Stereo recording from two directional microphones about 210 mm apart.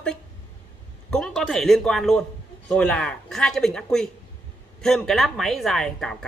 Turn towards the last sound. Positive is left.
turn(degrees=5)  # may be behind; listen again after turning